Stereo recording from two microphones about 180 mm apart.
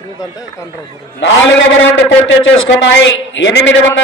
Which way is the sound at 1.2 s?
90° left.